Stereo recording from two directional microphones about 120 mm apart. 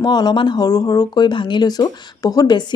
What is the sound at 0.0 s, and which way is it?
Speech, 35° left (ahead or behind).